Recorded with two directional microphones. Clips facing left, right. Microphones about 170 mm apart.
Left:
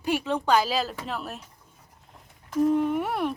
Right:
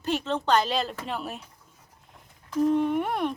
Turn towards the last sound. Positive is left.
turn(degrees=5)  # may be behind; listen again after turning